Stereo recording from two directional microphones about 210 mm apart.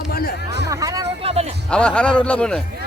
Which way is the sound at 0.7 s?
15° right (ahead or behind).